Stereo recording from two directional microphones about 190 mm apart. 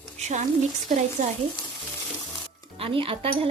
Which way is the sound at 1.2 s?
40° right (ahead or behind).